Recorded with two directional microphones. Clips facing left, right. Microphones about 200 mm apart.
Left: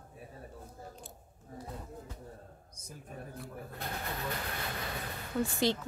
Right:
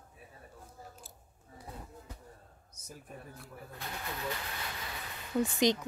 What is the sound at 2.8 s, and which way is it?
Speech, centre (ahead or behind).